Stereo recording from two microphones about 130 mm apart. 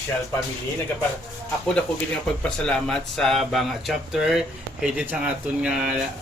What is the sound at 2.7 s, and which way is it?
Speech, 5° left (ahead or behind).